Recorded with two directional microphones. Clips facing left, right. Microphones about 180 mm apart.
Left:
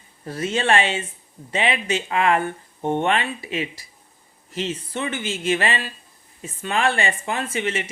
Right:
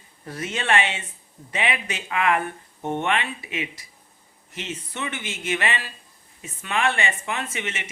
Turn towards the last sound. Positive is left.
turn(degrees=35)  # may be behind; listen again after turning